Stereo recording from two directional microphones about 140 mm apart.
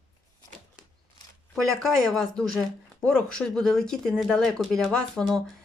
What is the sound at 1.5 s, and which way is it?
Speech, centre (ahead or behind).